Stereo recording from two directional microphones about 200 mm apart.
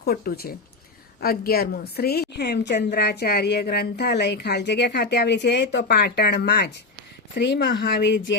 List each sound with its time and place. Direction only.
0.0 s a woman's voice: 50° left (ahead or behind)